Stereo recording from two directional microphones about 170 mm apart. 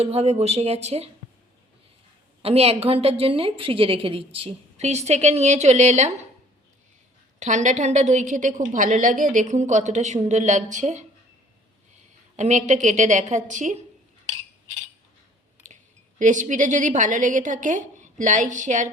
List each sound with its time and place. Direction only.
0.0 s a woman's voice: 35° right (ahead or behind)
2.4 s a woman's voice: 35° right (ahead or behind)
7.3 s a woman's voice: 45° right (ahead or behind)
12.4 s a woman's voice: 45° right (ahead or behind)
15.6 s speech: 45° right (ahead or behind)